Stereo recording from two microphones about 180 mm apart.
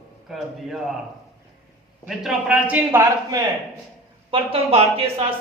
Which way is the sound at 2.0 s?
5° right (ahead or behind).